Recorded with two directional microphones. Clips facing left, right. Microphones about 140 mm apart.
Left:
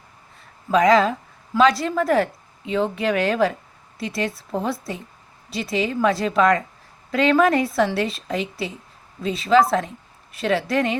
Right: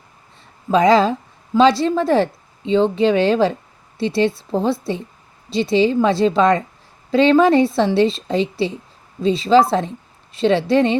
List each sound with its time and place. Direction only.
0.7 s a woman's voice: 30° right (ahead or behind)